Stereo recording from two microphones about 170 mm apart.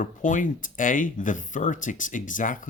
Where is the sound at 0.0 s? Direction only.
50° left (ahead or behind).